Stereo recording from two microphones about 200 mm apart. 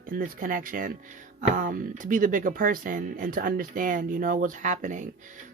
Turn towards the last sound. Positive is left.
turn(degrees=-40)  # may be behind; listen again after turning